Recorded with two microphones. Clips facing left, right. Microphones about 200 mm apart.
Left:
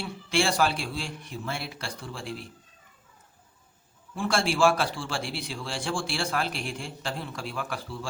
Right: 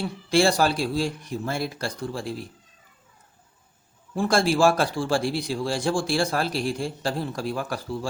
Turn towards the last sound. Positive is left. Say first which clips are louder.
# right 6 dB
turn(degrees=-40)  # may be behind; listen again after turning